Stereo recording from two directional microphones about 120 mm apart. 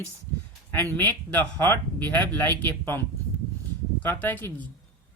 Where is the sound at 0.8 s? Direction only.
15° left (ahead or behind).